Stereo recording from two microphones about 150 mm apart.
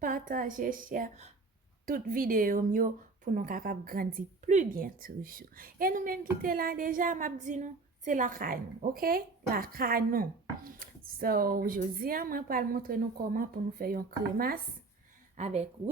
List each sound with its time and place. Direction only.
0.0 s a woman's voice: 70° right (ahead or behind)
6.4 s a woman's voice: 75° right (ahead or behind)
15.4 s speech: 50° right (ahead or behind)